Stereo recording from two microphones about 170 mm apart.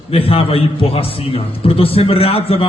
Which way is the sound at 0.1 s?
35° left (ahead or behind).